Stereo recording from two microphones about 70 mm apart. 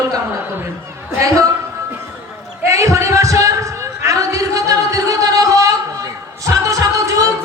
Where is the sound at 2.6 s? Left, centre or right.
Right.